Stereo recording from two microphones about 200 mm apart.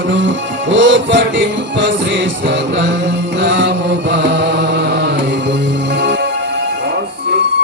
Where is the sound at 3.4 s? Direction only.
60° right (ahead or behind).